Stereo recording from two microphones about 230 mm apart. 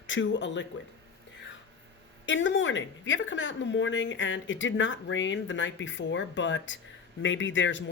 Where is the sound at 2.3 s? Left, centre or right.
Left.